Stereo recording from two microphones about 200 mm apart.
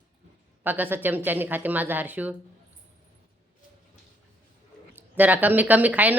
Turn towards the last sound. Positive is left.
turn(degrees=-10)  # may be behind; listen again after turning